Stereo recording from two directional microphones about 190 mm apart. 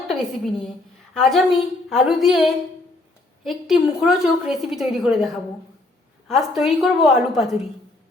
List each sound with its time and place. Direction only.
0.1 s a woman's voice: centre (ahead or behind)